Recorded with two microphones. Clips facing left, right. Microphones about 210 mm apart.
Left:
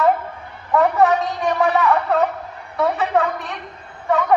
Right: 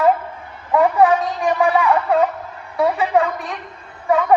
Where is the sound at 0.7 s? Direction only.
10° right (ahead or behind).